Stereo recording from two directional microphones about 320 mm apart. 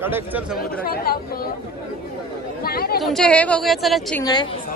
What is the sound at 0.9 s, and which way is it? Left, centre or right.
Speech, left.